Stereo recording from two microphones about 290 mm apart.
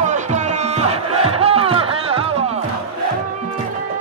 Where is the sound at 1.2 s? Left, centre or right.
Centre.